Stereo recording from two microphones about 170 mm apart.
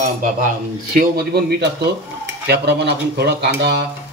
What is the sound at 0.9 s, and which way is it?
Speech, 70° right (ahead or behind).